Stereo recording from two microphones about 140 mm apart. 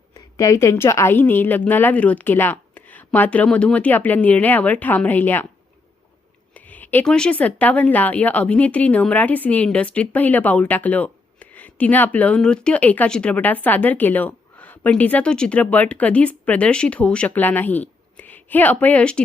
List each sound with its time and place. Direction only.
0.3 s speech: 25° left (ahead or behind)
6.5 s speech: 10° left (ahead or behind)